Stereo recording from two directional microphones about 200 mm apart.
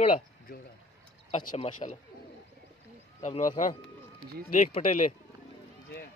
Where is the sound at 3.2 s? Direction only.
35° left (ahead or behind).